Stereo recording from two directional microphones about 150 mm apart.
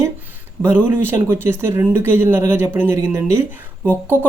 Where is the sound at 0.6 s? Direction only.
15° right (ahead or behind).